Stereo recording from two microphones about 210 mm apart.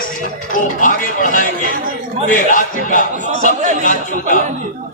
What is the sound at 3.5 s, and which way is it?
Speech, 35° right (ahead or behind).